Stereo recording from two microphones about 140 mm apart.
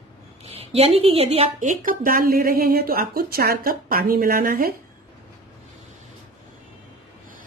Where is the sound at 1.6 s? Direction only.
70° right (ahead or behind); by 4.8 s 90° right.